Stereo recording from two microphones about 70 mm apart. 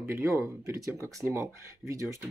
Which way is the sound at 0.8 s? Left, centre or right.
Right.